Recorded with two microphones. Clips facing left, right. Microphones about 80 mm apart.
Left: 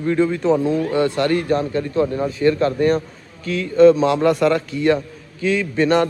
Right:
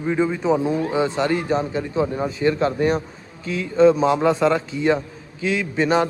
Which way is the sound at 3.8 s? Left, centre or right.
Centre.